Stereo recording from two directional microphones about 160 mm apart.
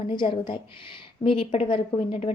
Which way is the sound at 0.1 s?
30° left (ahead or behind).